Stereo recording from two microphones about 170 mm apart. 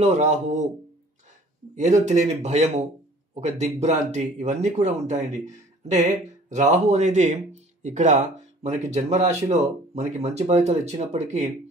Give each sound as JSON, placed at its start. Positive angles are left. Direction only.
{"t": 0.0, "sound": "speech", "side_deg": -40}
{"t": 1.8, "sound": "speech", "side_deg": -45}